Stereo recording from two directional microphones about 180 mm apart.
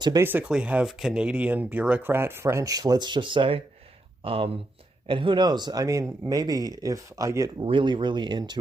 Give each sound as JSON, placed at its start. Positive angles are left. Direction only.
{"t": 0.0, "sound": "speech", "side_deg": -20}
{"t": 0.3, "sound": "speech", "side_deg": -10}